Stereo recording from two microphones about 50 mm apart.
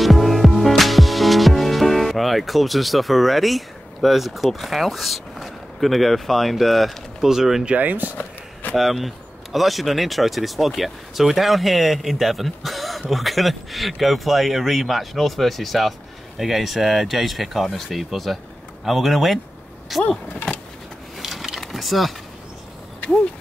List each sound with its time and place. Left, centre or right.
0.0 s music: centre
7.6 s speech: right
8.7 s speech: centre
21.2 s a sound: centre